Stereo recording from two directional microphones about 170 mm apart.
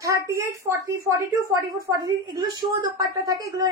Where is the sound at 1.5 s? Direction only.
20° right (ahead or behind).